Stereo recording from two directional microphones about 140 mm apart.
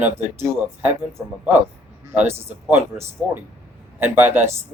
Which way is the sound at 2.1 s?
15° right (ahead or behind).